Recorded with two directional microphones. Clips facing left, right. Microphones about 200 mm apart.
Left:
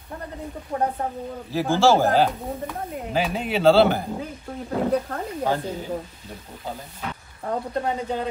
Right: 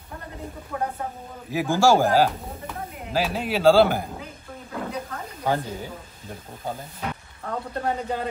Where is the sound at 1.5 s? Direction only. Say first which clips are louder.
Left 1 dB; 15° right (ahead or behind).